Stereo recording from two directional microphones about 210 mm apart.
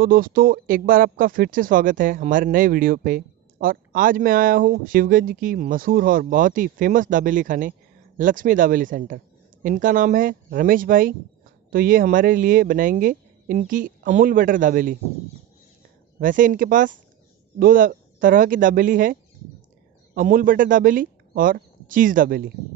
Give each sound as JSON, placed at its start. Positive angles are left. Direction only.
{"t": 0.0, "sound": "speech", "side_deg": -40}
{"t": 16.2, "sound": "speech", "side_deg": -40}
{"t": 20.2, "sound": "speech", "side_deg": -40}